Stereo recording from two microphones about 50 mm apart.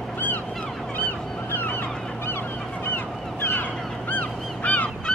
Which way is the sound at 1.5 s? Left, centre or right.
Left.